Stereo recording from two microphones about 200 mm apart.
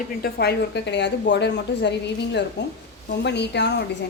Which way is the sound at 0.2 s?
55° left (ahead or behind).